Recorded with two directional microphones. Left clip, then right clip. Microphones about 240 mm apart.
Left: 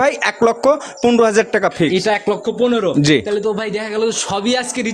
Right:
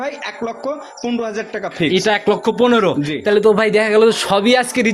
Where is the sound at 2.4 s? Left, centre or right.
Right.